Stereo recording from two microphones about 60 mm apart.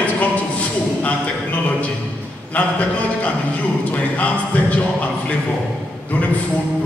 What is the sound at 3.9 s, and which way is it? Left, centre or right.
A man's voice, left.